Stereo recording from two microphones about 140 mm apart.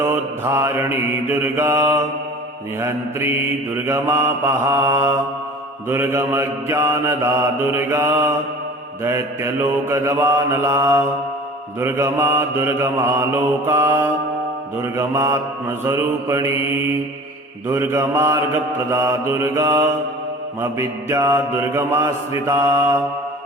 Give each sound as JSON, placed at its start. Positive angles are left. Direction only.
{"t": 0.0, "sound": "mantra", "side_deg": -15}
{"t": 17.7, "sound": "mantra", "side_deg": -15}